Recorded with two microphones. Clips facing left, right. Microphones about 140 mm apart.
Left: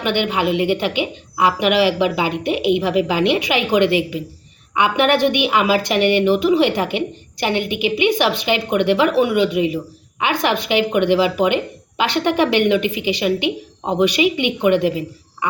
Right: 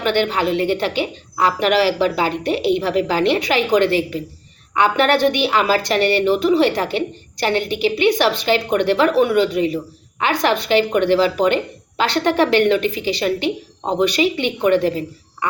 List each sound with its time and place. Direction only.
0.0 s a woman's voice: 10° left (ahead or behind)